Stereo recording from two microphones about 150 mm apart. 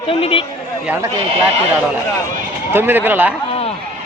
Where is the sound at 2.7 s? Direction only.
15° right (ahead or behind).